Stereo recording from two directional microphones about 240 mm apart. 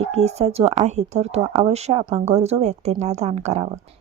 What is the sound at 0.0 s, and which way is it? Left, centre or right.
Speech, right.